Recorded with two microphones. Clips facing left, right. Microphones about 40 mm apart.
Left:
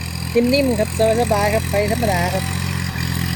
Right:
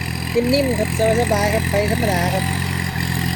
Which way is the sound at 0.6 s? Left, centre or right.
Right.